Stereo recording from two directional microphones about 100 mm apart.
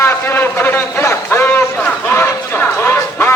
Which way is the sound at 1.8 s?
20° left (ahead or behind).